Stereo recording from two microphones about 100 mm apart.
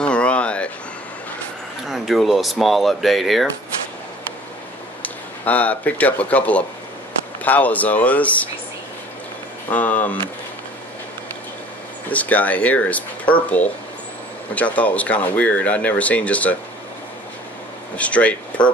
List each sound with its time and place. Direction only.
0.0 s a sound: 10° left (ahead or behind)
1.9 s speech: centre (ahead or behind)
5.0 s speech: 15° left (ahead or behind)
9.7 s speech: 15° left (ahead or behind)
12.1 s speech: 15° left (ahead or behind)
14.5 s speech: 15° left (ahead or behind)
17.9 s speech: 15° left (ahead or behind)